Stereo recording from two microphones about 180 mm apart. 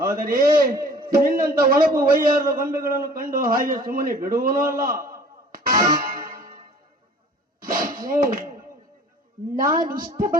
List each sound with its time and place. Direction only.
0.0 s a man's voice: 50° right (ahead or behind)
5.5 s music: 55° right (ahead or behind)
7.6 s a sound: 50° right (ahead or behind)
9.6 s a man's voice: 50° right (ahead or behind)